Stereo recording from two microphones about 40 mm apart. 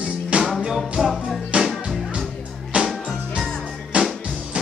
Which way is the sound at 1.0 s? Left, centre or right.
Centre.